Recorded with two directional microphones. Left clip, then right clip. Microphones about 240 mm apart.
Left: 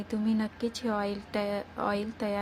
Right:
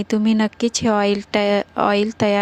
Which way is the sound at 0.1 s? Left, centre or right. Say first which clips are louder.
Right 12 dB; right.